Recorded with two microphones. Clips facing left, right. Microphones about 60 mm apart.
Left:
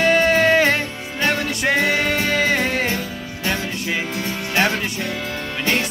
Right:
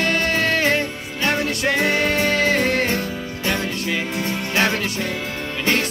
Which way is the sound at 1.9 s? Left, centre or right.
Left.